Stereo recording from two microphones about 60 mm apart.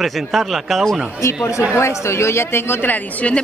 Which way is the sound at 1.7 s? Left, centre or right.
Left.